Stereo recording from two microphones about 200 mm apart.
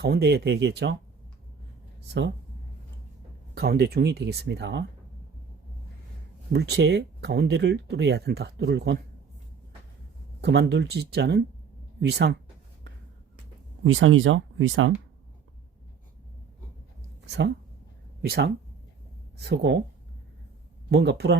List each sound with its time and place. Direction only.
0.0 s speech: 55° right (ahead or behind)
3.5 s speech: 50° right (ahead or behind)
6.5 s speech: 55° right (ahead or behind)
10.4 s speech: 60° right (ahead or behind)
13.8 s speech: 80° right
18.2 s speech: 50° right (ahead or behind)
20.9 s speech: 55° right (ahead or behind)